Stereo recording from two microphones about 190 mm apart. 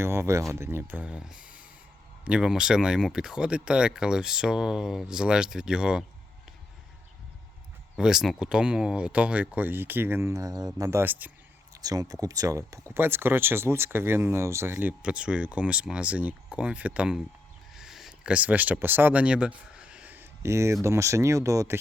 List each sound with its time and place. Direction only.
0.0 s speech: 15° right (ahead or behind)
7.9 s speech: 5° right (ahead or behind)
17.7 s a sound: centre (ahead or behind)
20.8 s speech: 15° right (ahead or behind)